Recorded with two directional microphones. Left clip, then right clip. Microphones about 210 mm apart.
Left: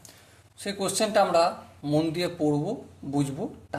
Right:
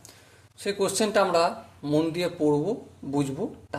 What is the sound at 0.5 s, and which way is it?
Speech, 10° right (ahead or behind).